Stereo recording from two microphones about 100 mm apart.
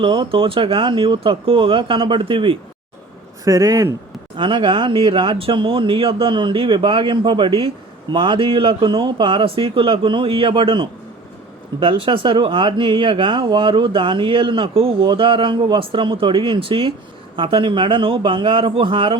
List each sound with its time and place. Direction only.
0.0 s speech: 55° right (ahead or behind)
3.4 s a man's voice: 35° right (ahead or behind)
4.4 s speech: 55° right (ahead or behind)